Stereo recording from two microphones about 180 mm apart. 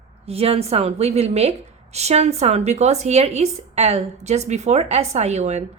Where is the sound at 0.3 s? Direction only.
35° right (ahead or behind).